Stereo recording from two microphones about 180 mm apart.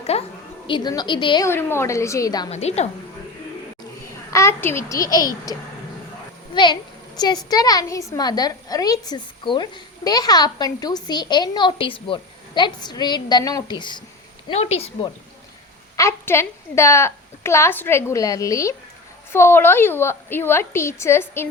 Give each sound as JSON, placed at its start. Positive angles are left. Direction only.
{"t": 0.1, "sound": "speech", "side_deg": 35}
{"t": 0.7, "sound": "a woman's voice", "side_deg": 20}
{"t": 1.5, "sound": "a woman's voice", "side_deg": 15}
{"t": 2.5, "sound": "speech", "side_deg": 35}
{"t": 4.3, "sound": "a woman's voice", "side_deg": 15}
{"t": 14.4, "sound": "speech", "side_deg": 35}
{"t": 16.0, "sound": "a woman's voice", "side_deg": 15}